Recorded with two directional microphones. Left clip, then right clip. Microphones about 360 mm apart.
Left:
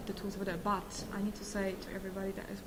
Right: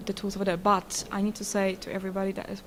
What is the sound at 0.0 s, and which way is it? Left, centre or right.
A woman's voice, right.